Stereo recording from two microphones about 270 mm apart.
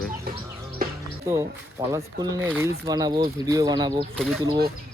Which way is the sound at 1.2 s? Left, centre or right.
Centre.